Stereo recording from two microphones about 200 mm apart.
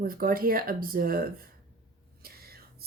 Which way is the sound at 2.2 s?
50° right (ahead or behind).